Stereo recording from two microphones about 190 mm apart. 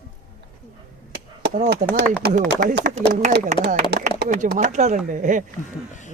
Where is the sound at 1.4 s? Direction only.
50° right (ahead or behind).